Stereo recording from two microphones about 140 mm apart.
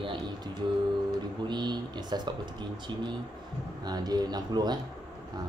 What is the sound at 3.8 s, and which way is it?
Speech, 30° right (ahead or behind).